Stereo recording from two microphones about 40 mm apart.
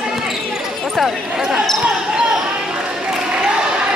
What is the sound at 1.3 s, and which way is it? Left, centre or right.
Speech, centre.